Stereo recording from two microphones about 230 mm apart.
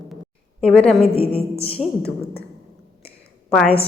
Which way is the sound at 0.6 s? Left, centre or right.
Centre.